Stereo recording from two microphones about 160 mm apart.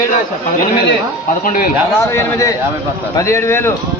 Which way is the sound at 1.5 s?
60° left (ahead or behind).